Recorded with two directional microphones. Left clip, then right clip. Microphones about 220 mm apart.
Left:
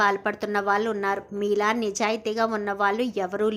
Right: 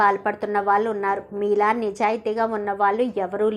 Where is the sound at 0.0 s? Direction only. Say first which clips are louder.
Right 3 dB; 20° left (ahead or behind).